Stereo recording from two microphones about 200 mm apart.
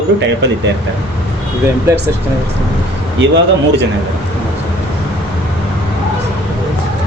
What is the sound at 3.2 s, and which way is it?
Speech, 65° right (ahead or behind).